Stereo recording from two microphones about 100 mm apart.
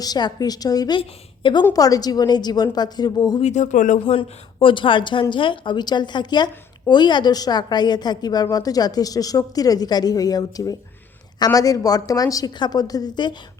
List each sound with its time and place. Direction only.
0.0 s a woman's voice: 45° left (ahead or behind)
0.9 s a woman's voice: 55° left (ahead or behind)
1.7 s a woman's voice: 40° left (ahead or behind)
4.0 s a woman's voice: 60° left (ahead or behind)